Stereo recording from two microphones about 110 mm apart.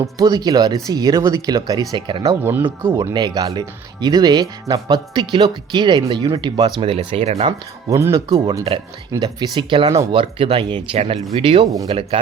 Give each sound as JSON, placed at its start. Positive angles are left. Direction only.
{"t": 0.2, "sound": "speech", "side_deg": -35}
{"t": 2.4, "sound": "speech", "side_deg": -20}
{"t": 3.1, "sound": "speech", "side_deg": -40}
{"t": 6.8, "sound": "speech", "side_deg": -60}
{"t": 7.9, "sound": "speech", "side_deg": -30}
{"t": 9.1, "sound": "speech", "side_deg": -40}
{"t": 10.9, "sound": "speech", "side_deg": -65}